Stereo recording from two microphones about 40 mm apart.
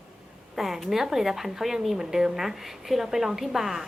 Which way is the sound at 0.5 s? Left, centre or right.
Centre.